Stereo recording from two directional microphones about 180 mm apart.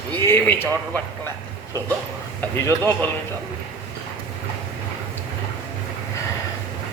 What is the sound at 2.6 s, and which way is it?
Speech, 15° left (ahead or behind).